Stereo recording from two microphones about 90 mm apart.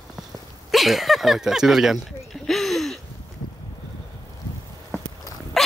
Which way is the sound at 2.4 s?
Centre (ahead or behind).